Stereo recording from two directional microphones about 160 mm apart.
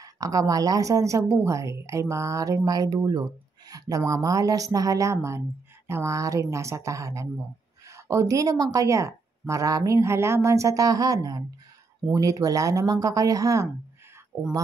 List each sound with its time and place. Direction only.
0.0 s speech: 20° right (ahead or behind)